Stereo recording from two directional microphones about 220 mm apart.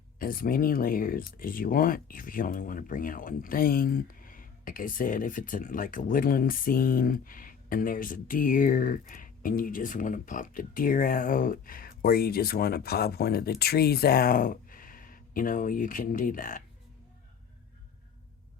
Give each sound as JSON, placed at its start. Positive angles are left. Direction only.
{"t": 0.2, "sound": "speech", "side_deg": 40}